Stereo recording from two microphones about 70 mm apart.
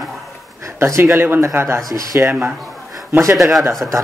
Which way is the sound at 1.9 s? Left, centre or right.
Right.